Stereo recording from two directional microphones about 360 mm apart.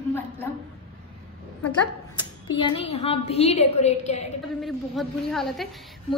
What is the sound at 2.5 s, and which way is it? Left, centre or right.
A woman's voice, centre.